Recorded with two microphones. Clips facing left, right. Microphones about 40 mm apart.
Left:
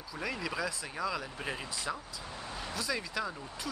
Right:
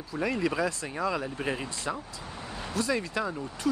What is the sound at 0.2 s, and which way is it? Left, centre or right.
Speech, centre.